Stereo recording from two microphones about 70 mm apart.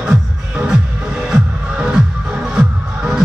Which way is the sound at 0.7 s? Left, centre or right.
Centre.